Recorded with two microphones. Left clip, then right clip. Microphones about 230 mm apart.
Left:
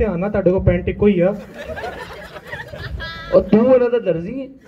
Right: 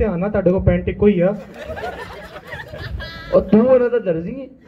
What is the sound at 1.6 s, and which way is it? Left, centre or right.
Speech, centre.